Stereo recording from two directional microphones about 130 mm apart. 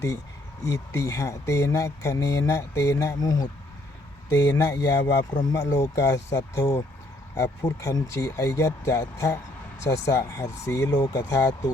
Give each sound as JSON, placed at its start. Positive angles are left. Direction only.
{"t": 0.7, "sound": "speech", "side_deg": 25}